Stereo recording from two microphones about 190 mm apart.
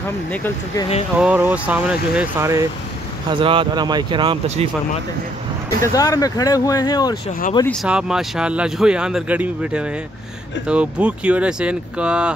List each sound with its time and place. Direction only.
1.1 s speech: 10° right (ahead or behind)
3.3 s speech: 25° right (ahead or behind)
5.8 s speech: 20° left (ahead or behind)
7.6 s speech: centre (ahead or behind)